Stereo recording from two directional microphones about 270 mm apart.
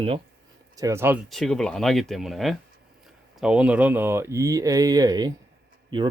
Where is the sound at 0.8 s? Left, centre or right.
Centre.